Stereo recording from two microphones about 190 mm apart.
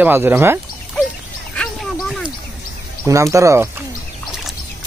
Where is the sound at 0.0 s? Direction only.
10° right (ahead or behind).